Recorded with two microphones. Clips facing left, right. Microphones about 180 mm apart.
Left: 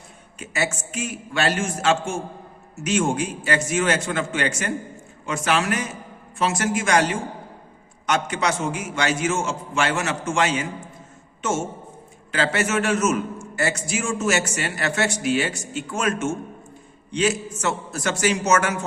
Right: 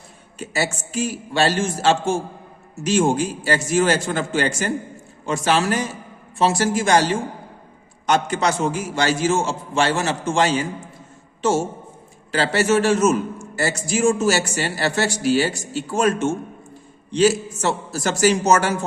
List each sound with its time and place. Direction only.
0.3 s a man's voice: 35° right (ahead or behind)
12.3 s a man's voice: 35° right (ahead or behind)